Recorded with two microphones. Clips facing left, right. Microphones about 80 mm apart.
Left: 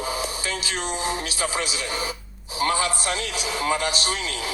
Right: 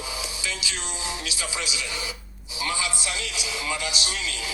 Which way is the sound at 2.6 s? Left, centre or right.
Left.